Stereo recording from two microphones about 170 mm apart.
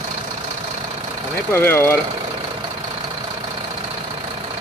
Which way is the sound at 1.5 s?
15° left (ahead or behind).